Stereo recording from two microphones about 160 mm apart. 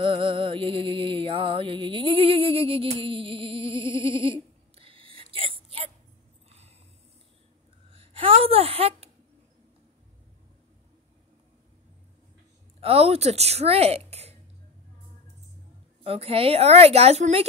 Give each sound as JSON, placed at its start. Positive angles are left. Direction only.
{"t": 0.0, "sound": "music", "side_deg": -35}
{"t": 7.9, "sound": "a sound", "side_deg": -35}
{"t": 12.8, "sound": "a woman's voice", "side_deg": -40}
{"t": 16.0, "sound": "a woman's voice", "side_deg": -40}